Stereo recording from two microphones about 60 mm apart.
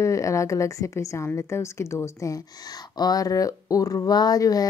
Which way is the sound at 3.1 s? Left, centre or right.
Left.